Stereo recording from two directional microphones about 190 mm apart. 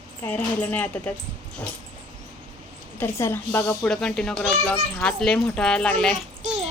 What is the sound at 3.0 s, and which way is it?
A child's voice, 10° left (ahead or behind).